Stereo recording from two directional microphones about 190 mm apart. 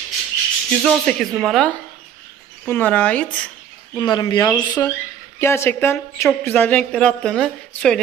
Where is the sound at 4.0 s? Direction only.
20° left (ahead or behind).